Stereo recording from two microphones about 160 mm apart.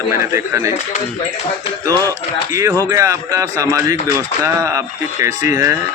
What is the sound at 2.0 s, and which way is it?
Speech, 20° right (ahead or behind).